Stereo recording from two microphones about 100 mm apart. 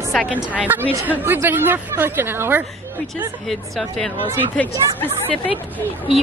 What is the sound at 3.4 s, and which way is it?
Speech, centre (ahead or behind).